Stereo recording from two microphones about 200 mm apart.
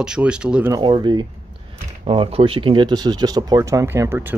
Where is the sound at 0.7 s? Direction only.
20° right (ahead or behind).